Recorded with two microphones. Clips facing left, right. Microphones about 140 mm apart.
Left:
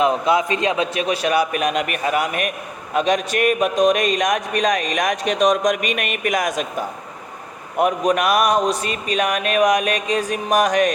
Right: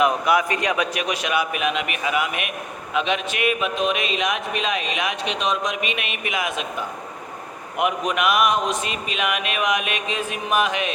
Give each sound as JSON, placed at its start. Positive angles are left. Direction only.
{"t": 0.0, "sound": "a man's voice", "side_deg": 25}